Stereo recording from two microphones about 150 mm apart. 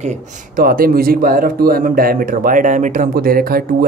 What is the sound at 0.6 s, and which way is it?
Speech, 75° right (ahead or behind).